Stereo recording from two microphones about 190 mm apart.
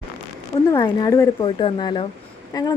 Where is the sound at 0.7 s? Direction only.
20° left (ahead or behind).